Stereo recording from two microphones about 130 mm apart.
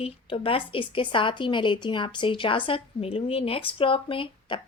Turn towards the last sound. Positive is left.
turn(degrees=40)  # may be behind; listen again after turning